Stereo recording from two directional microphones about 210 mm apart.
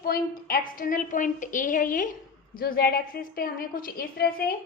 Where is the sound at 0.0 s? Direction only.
45° left (ahead or behind).